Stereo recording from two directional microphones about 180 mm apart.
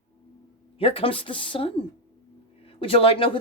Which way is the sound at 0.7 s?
30° left (ahead or behind).